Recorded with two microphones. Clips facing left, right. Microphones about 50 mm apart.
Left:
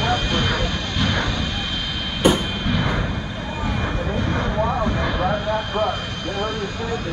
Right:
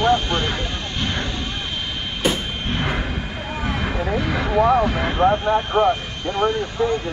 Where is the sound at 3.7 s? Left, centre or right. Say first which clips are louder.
Right 3 dB; right.